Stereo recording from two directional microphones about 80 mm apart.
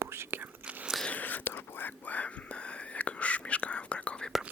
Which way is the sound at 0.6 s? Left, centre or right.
Centre.